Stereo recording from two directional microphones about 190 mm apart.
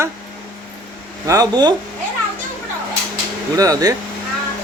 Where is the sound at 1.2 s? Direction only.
20° right (ahead or behind).